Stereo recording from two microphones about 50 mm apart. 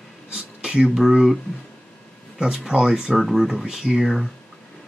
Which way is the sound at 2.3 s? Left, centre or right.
Centre.